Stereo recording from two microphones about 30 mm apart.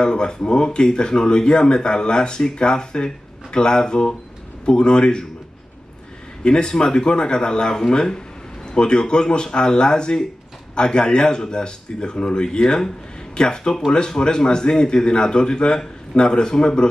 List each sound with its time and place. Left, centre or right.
0.0 s speech: left
6.4 s speech: left